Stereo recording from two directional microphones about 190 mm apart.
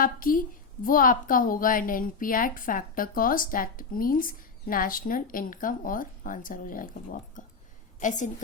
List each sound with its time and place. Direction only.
0.0 s a woman's voice: 45° left (ahead or behind)